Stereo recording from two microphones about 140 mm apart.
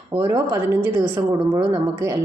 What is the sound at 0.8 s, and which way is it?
Speech, 15° right (ahead or behind).